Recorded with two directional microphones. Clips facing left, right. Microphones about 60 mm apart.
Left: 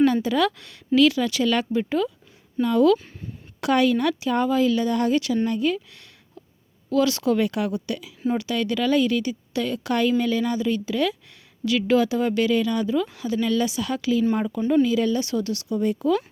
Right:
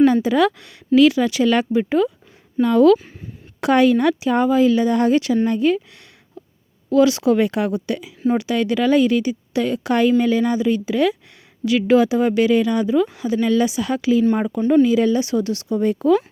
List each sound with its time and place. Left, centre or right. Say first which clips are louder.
0.0 s a woman's voice: right 5 dB; centre
2.6 s speech: right 5 dB; right
3.6 s speech: right 5 dB; right
6.9 s speech: right 6 dB; centre
7.3 s speech: right 4 dB; right
15.7 s speech: right 5 dB; right